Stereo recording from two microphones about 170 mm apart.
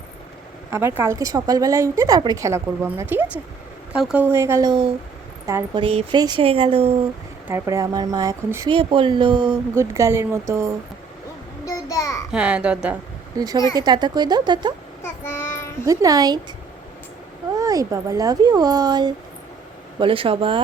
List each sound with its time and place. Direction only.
0.7 s a woman's voice: 15° right (ahead or behind)
5.7 s speech: 30° right (ahead or behind)
7.4 s a woman's voice: 15° right (ahead or behind)
8.7 s a woman's voice: 30° right (ahead or behind)
9.7 s a woman's voice: 15° right (ahead or behind)
11.6 s a child's voice: 20° left (ahead or behind)
12.3 s a woman's voice: 5° right (ahead or behind)
13.3 s a woman's voice: 20° right (ahead or behind)
15.0 s child singing: 15° left (ahead or behind)
15.9 s a woman's voice: 20° right (ahead or behind)
17.6 s a woman's voice: 20° right (ahead or behind)